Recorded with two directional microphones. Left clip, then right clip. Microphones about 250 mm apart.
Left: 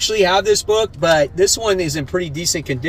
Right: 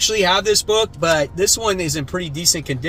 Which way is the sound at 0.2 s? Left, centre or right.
Centre.